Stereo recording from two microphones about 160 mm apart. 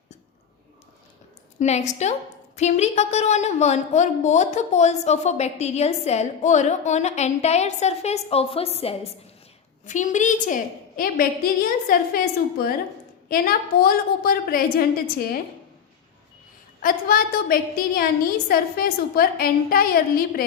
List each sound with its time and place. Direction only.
1.5 s a woman's voice: 45° left (ahead or behind)
9.8 s a woman's voice: 50° left (ahead or behind)
16.8 s a woman's voice: 65° left (ahead or behind)